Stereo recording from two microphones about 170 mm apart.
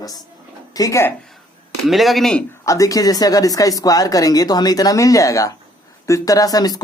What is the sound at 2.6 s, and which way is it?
Speech, 20° left (ahead or behind).